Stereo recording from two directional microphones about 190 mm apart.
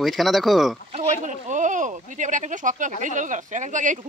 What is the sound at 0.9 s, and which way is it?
Speech, 40° right (ahead or behind).